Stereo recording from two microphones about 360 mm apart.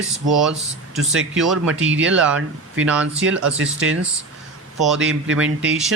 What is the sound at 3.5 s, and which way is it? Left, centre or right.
Speech, right.